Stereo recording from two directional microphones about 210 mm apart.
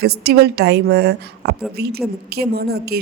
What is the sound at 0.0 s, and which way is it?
A woman's voice, 50° right (ahead or behind).